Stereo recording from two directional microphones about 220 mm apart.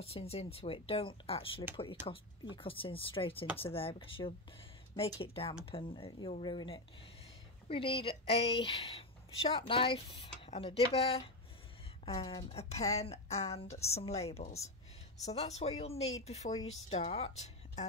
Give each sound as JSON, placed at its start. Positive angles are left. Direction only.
{"t": 0.0, "sound": "speech", "side_deg": 25}
{"t": 16.4, "sound": "speech", "side_deg": 40}
{"t": 16.9, "sound": "speech", "side_deg": 30}